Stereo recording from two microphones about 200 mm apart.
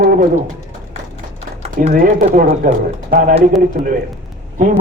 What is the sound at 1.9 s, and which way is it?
A man's voice, 45° right (ahead or behind).